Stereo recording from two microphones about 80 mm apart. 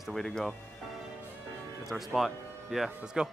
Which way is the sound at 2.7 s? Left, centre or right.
Centre.